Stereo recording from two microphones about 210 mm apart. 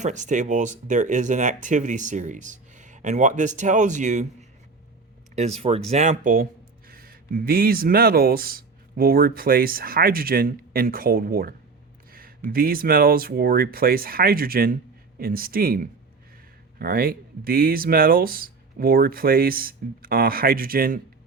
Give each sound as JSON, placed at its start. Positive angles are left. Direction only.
{"t": 0.0, "sound": "speech", "side_deg": -35}